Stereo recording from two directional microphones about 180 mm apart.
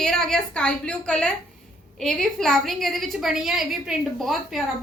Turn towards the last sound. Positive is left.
turn(degrees=0)  # may be behind; listen again after turning